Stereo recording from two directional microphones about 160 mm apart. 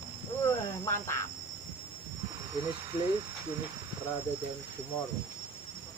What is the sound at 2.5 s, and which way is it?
Speech, 25° right (ahead or behind).